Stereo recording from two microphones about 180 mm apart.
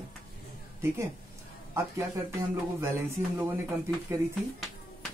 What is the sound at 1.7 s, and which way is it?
Speech, 15° right (ahead or behind).